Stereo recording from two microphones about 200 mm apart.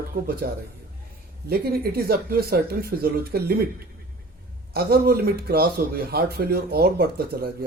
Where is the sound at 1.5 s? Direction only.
50° right (ahead or behind).